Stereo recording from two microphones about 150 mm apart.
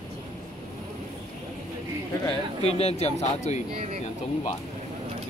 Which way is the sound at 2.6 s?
45° left (ahead or behind).